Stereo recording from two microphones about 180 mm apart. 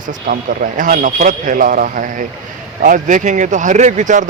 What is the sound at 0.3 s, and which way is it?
Speech, 50° right (ahead or behind).